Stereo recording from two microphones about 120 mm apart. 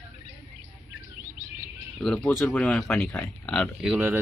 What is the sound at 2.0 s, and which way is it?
Speech, 5° left (ahead or behind).